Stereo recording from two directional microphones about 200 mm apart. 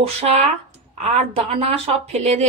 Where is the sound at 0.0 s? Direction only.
35° right (ahead or behind).